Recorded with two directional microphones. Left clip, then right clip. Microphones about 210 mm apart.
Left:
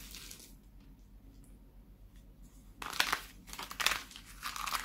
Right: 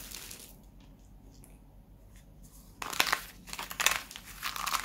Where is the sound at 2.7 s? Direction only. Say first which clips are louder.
Right 4 dB; 5° right (ahead or behind).